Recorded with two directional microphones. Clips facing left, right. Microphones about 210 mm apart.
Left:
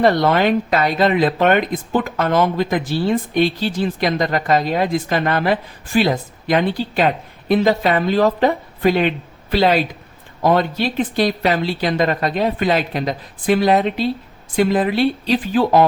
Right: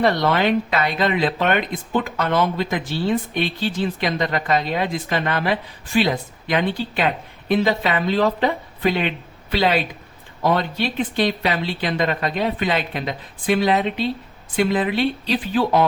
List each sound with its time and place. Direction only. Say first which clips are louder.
0.0 s a woman's voice: left 4 dB; 45° left (ahead or behind)
4.0 s a woman's voice: left 5 dB; 40° left (ahead or behind)